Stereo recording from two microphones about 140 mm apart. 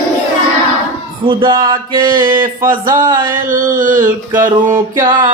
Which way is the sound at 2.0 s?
80° right.